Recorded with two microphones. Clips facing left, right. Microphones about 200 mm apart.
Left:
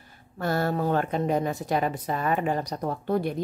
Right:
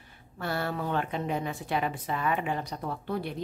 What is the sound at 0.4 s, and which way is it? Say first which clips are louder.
A woman's voice: left 6 dB; 45° left (ahead or behind).